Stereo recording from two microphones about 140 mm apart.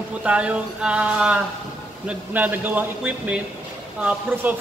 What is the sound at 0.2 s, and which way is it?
A man's voice, 10° right (ahead or behind).